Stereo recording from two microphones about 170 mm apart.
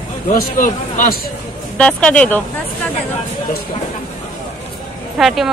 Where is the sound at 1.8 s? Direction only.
5° left (ahead or behind).